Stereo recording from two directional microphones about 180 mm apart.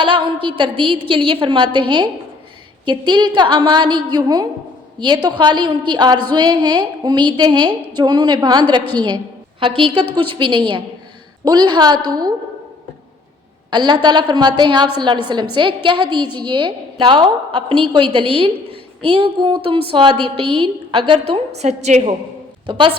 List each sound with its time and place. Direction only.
0.0 s a woman's voice: 25° right (ahead or behind)
13.7 s a woman's voice: 25° right (ahead or behind)
22.6 s a woman's voice: 25° right (ahead or behind)